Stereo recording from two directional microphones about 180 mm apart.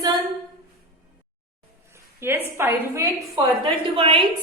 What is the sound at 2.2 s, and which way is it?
A woman's voice, 15° right (ahead or behind).